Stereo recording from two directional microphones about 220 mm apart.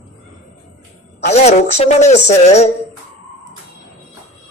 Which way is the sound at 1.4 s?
30° left (ahead or behind).